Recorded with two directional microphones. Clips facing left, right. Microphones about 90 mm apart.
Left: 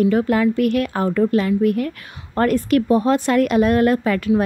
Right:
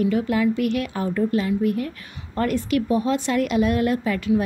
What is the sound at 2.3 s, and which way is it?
A woman's voice, 50° left (ahead or behind).